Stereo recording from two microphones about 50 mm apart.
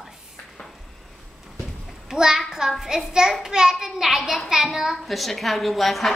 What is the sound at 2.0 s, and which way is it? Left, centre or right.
A child's voice, centre.